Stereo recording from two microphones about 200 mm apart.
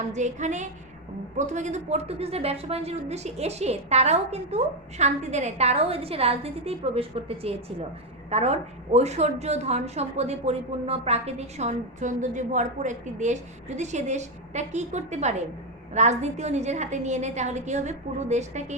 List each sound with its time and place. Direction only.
0.1 s a woman's voice: 35° right (ahead or behind)